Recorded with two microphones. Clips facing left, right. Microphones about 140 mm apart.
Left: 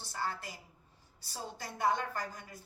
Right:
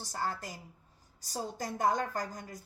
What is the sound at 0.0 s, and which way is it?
A woman's voice, 40° right (ahead or behind).